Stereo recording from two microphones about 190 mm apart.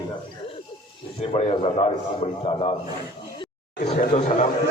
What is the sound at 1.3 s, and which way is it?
A man's voice, 30° left (ahead or behind).